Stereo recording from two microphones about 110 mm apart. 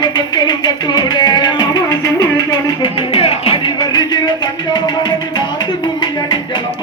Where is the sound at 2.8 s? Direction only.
55° left (ahead or behind).